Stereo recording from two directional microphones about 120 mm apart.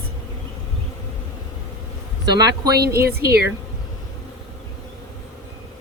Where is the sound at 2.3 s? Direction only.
35° right (ahead or behind).